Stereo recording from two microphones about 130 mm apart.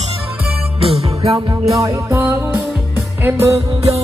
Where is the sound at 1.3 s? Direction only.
25° right (ahead or behind).